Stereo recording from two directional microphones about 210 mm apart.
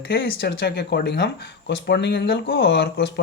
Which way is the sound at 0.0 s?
55° left (ahead or behind).